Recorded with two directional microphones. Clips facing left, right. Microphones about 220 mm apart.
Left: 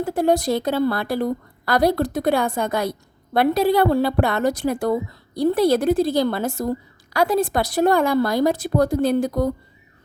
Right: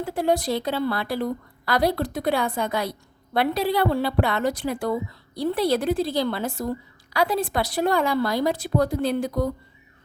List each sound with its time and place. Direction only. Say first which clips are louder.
0.0 s a woman's voice: left 4 dB; 45° left (ahead or behind)